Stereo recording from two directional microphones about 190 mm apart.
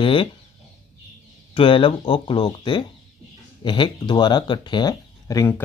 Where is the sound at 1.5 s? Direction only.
25° left (ahead or behind).